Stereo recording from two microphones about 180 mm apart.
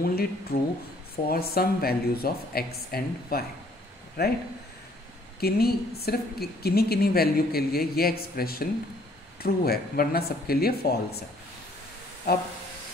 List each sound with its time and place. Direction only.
0.0 s a woman's voice: 60° left (ahead or behind)
5.4 s a woman's voice: 60° left (ahead or behind)
12.3 s a woman's voice: 60° left (ahead or behind)